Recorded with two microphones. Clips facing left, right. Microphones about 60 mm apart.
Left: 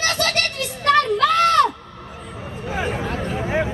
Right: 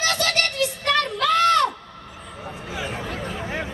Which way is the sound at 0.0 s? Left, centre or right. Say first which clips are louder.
Left 1 dB; left.